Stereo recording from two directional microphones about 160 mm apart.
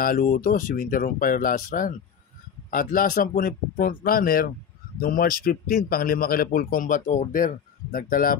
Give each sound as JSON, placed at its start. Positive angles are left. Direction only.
{"t": 0.0, "sound": "a man's voice", "side_deg": 60}